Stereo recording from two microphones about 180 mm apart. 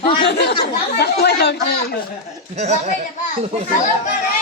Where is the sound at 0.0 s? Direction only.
30° left (ahead or behind).